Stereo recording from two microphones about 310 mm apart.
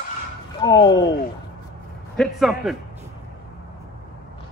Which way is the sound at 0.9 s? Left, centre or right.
Left.